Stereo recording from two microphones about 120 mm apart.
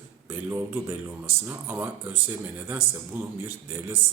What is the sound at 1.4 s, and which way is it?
Speech, 20° right (ahead or behind).